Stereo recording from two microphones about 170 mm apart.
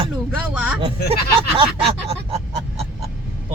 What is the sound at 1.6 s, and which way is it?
Speech, 35° right (ahead or behind).